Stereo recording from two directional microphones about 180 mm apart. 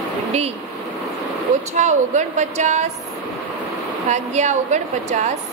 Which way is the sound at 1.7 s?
40° right (ahead or behind).